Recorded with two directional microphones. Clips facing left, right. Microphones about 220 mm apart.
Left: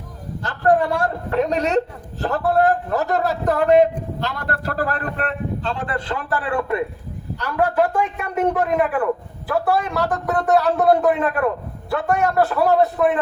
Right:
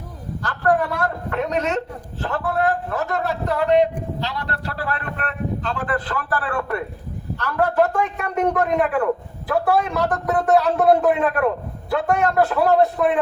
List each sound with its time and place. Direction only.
0.4 s a man's voice: 25° left (ahead or behind); by 13.1 s centre (ahead or behind)